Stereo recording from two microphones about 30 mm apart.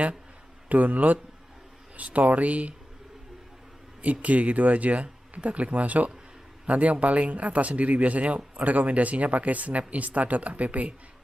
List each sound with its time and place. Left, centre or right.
0.7 s speech: right
4.0 s speech: right